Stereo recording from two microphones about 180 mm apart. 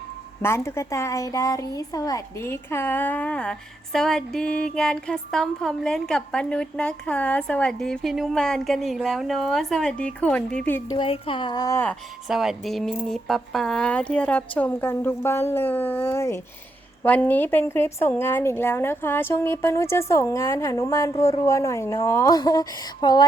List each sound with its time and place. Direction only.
0.4 s speech: 15° left (ahead or behind)
10.9 s speech: 30° left (ahead or behind); by 11.9 s 15° left (ahead or behind)
12.3 s speech: centre (ahead or behind); by 23.2 s 25° left (ahead or behind)